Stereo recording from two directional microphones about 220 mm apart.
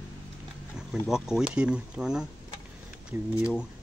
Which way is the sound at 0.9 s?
Centre (ahead or behind).